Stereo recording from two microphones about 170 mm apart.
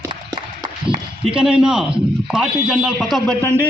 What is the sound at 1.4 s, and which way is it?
Speech, 5° right (ahead or behind).